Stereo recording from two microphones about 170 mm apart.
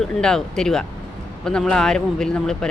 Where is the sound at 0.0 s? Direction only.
5° left (ahead or behind).